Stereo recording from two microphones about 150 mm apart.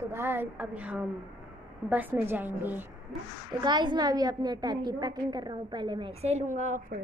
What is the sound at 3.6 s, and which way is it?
A woman's voice, 30° right (ahead or behind).